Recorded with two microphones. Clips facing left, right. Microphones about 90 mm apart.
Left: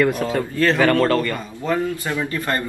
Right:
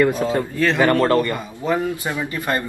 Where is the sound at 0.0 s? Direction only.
20° right (ahead or behind).